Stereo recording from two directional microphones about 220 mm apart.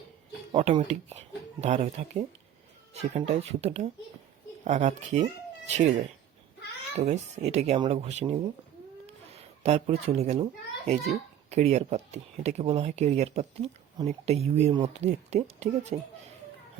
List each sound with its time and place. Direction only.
0.5 s speech: 30° right (ahead or behind)
9.0 s a sound: 30° right (ahead or behind)
11.4 s speech: 30° right (ahead or behind)